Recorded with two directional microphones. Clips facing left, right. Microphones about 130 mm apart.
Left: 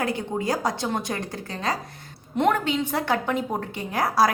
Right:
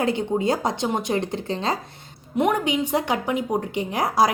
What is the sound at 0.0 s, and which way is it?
A woman's voice, 25° right (ahead or behind).